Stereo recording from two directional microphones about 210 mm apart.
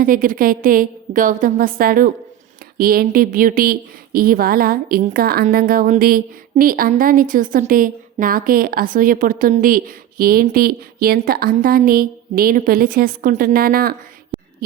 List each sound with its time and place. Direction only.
0.0 s a woman's voice: 40° right (ahead or behind)